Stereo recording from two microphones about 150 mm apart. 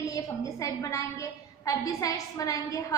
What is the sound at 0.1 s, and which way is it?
A woman's voice, 20° left (ahead or behind).